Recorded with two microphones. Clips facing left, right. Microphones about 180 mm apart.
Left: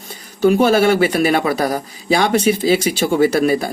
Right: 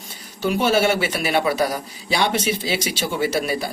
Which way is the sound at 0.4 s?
45° left (ahead or behind).